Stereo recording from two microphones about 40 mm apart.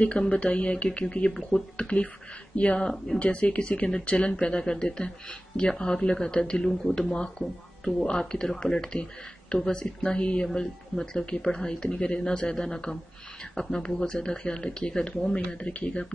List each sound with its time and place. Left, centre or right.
0.0 s speech: left
3.2 s speech: left
3.8 s speech: centre
4.1 s speech: left; by 7.0 s centre
7.0 s speech: centre